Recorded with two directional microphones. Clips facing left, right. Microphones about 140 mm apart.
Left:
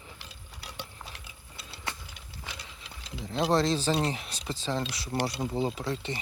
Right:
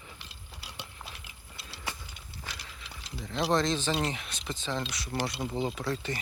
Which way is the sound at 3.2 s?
30° left (ahead or behind).